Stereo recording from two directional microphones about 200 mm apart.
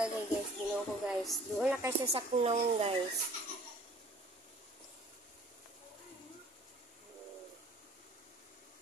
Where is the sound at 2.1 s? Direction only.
30° right (ahead or behind).